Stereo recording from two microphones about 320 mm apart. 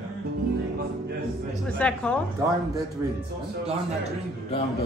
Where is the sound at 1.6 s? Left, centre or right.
Centre.